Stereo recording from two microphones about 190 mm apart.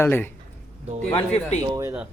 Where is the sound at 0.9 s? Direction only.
40° right (ahead or behind).